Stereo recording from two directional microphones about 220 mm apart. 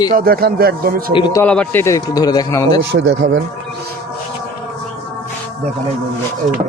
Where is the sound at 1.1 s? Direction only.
20° left (ahead or behind).